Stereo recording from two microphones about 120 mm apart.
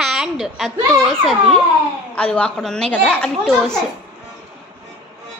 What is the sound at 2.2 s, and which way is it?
A woman's voice, 10° left (ahead or behind).